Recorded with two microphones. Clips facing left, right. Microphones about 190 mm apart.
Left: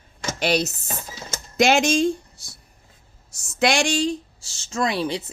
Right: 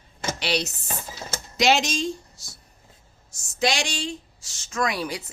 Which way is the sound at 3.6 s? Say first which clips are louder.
Left 5 dB; 50° left (ahead or behind).